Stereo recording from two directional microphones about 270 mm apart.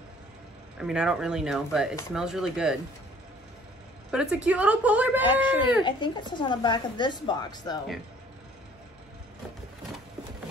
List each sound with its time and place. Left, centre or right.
0.7 s speech: centre
4.1 s speech: centre
5.9 s a woman's voice: centre